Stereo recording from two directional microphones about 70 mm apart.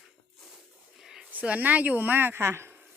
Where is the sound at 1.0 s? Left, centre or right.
Centre.